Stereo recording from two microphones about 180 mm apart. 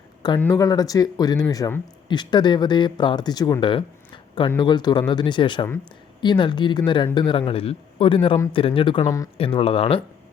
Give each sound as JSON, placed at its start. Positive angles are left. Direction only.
{"t": 0.3, "sound": "speech", "side_deg": 15}
{"t": 9.0, "sound": "speech", "side_deg": 20}
{"t": 9.4, "sound": "speech", "side_deg": 30}